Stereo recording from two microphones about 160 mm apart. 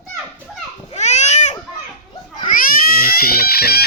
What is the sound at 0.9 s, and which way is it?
Baby cry, 45° left (ahead or behind).